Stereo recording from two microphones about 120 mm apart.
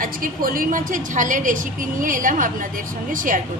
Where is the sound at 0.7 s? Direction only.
90° right.